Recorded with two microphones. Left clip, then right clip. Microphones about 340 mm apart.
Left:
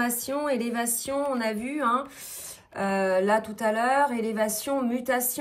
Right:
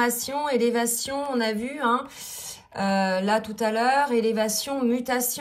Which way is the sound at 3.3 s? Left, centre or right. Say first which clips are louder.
Even; centre.